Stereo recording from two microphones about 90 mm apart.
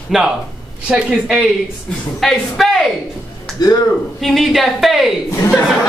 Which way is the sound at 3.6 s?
50° left (ahead or behind).